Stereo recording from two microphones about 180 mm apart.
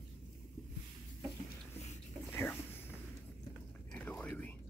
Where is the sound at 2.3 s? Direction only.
10° left (ahead or behind).